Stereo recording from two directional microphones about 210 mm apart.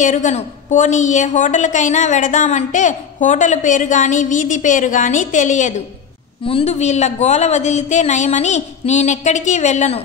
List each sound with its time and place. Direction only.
0.0 s a woman's voice: 35° left (ahead or behind)